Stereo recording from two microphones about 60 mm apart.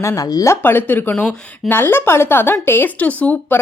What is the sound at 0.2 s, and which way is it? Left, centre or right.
Speech, left.